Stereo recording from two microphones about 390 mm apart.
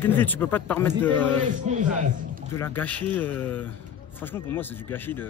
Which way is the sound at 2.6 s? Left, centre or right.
Centre.